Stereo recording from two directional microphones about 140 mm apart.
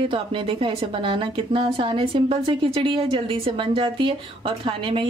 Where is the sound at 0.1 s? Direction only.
40° right (ahead or behind).